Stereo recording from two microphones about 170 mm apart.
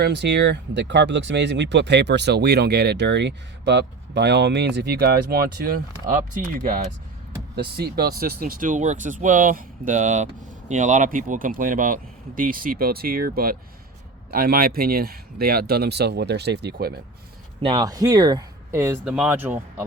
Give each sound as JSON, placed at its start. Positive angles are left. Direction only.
{"t": 0.0, "sound": "speech", "side_deg": -80}
{"t": 7.5, "sound": "speech", "side_deg": -65}
{"t": 17.6, "sound": "speech", "side_deg": -25}